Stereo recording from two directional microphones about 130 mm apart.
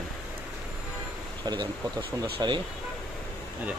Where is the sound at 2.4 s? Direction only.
30° right (ahead or behind).